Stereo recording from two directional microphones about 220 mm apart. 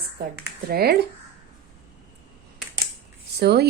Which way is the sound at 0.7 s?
45° right (ahead or behind).